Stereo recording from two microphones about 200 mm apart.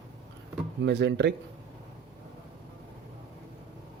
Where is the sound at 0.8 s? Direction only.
60° right (ahead or behind).